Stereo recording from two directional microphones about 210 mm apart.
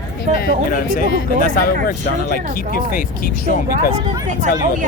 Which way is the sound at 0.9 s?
40° left (ahead or behind).